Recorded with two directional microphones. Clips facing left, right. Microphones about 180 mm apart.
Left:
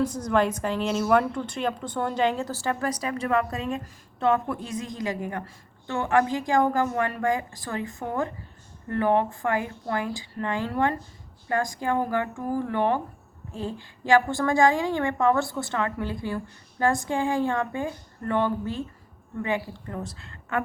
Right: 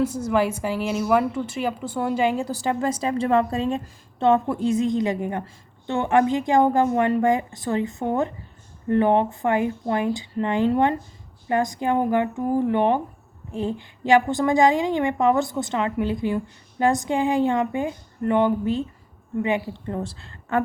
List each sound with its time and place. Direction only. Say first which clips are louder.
0.0 s a woman's voice: right 2 dB; 5° right (ahead or behind); by 20.6 s 30° right (ahead or behind)